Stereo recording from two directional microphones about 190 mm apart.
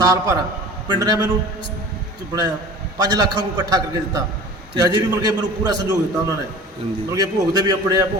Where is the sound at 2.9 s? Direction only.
20° right (ahead or behind).